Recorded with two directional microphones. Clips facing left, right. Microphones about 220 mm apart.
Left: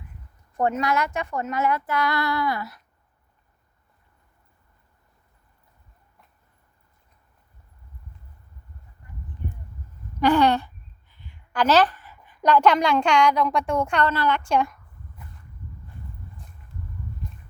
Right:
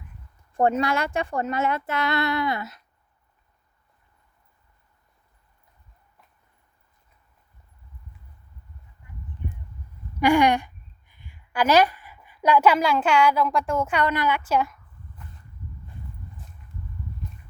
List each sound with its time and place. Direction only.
0.5 s speech: 30° right (ahead or behind)
10.2 s a woman's voice: 10° right (ahead or behind)